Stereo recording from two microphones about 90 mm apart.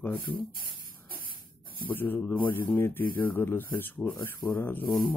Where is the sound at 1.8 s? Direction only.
20° left (ahead or behind).